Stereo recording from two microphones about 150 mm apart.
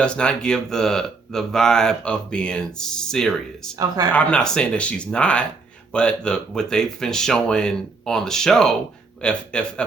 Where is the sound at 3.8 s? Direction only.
25° right (ahead or behind).